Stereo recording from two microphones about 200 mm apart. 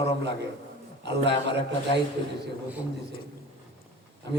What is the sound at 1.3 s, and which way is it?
Speech, 60° right (ahead or behind).